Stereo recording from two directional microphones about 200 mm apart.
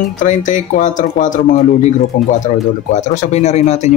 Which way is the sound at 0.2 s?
40° left (ahead or behind).